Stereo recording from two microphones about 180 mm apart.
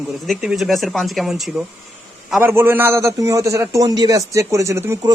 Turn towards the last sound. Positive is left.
turn(degrees=-15)  # may be behind; listen again after turning